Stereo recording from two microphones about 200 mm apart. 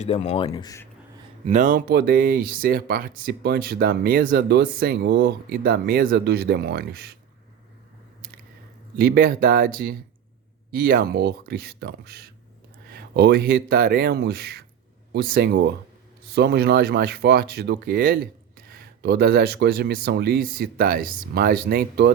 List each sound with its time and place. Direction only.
0.0 s speech: 35° left (ahead or behind)
1.5 s speech: 40° right (ahead or behind)
9.0 s speech: 50° right (ahead or behind)